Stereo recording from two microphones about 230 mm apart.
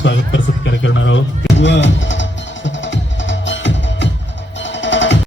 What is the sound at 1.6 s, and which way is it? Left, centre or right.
Music, left.